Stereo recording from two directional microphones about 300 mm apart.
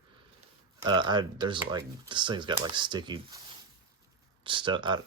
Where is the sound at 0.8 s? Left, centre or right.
Centre.